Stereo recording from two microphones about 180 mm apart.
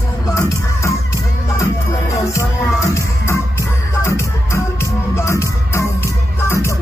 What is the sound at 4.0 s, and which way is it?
Music, 15° left (ahead or behind).